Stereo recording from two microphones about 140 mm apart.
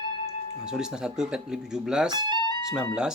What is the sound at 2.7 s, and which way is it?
Speech, 5° right (ahead or behind).